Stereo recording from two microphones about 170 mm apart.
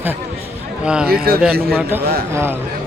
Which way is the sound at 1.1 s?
65° right (ahead or behind).